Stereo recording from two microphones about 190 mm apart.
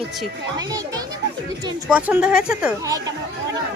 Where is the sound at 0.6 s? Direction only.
20° right (ahead or behind).